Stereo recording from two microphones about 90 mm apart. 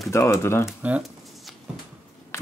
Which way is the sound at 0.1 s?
30° left (ahead or behind).